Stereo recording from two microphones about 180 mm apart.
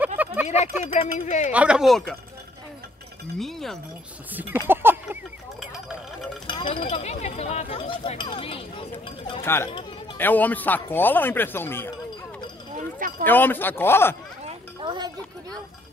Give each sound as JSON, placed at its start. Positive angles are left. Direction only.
{"t": 0.0, "sound": "a sound", "side_deg": -10}
{"t": 1.1, "sound": "speech", "side_deg": 40}
{"t": 1.5, "sound": "speech", "side_deg": -5}
{"t": 3.3, "sound": "speech", "side_deg": 0}
{"t": 4.3, "sound": "speech", "side_deg": -10}
{"t": 4.6, "sound": "a sound", "side_deg": -10}
{"t": 6.4, "sound": "speech", "side_deg": 25}
{"t": 9.4, "sound": "speech", "side_deg": 15}
{"t": 13.2, "sound": "speech", "side_deg": 10}
{"t": 14.4, "sound": "children playing", "side_deg": -25}